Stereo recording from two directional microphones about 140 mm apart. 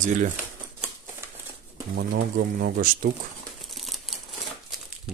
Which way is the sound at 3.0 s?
75° right (ahead or behind).